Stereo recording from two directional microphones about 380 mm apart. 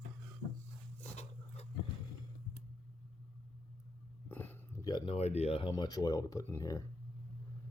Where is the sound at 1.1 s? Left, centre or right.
Centre.